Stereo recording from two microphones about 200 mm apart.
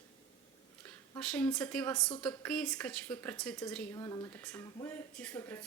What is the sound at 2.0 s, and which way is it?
Speech, 25° left (ahead or behind).